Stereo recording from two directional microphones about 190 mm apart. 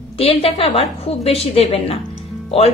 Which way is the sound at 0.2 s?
30° left (ahead or behind).